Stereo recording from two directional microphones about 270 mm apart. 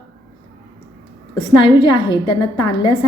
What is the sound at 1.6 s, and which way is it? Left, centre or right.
A woman's voice, centre.